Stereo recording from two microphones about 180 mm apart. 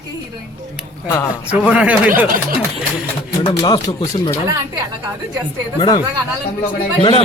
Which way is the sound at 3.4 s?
20° left (ahead or behind).